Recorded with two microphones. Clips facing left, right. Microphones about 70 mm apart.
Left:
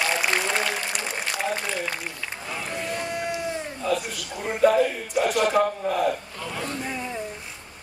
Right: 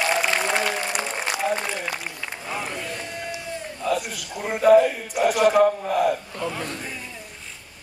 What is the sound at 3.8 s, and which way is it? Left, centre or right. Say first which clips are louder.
A man's voice: right 2 dB; centre.